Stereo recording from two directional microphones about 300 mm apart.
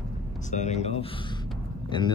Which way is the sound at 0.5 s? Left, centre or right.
Left.